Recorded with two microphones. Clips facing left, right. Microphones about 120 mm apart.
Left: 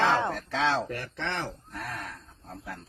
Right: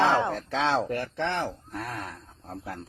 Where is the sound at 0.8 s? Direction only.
30° right (ahead or behind).